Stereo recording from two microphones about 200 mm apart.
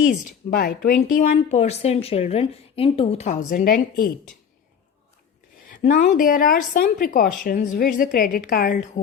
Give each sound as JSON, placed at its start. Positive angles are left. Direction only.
{"t": 0.5, "sound": "speech", "side_deg": 45}
{"t": 1.1, "sound": "a woman's voice", "side_deg": 35}
{"t": 3.5, "sound": "speech", "side_deg": 45}
{"t": 5.7, "sound": "speech", "side_deg": 40}